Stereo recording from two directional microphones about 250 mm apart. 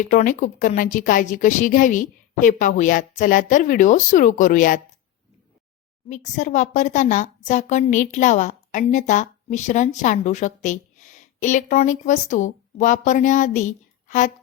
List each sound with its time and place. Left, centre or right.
0.0 s a woman's voice: left
6.1 s a woman's voice: left